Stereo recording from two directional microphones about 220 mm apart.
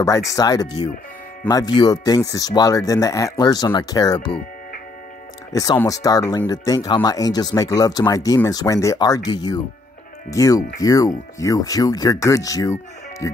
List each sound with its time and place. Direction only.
0.3 s speech: 15° left (ahead or behind)
5.5 s speech: 15° left (ahead or behind)